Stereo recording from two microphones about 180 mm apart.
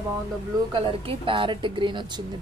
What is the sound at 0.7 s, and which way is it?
A woman's voice, 30° right (ahead or behind).